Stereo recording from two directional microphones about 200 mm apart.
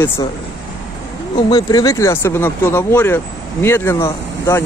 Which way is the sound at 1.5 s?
20° left (ahead or behind).